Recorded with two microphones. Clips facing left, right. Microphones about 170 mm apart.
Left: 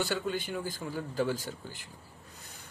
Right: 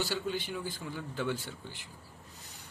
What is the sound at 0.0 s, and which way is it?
Speech, 50° left (ahead or behind).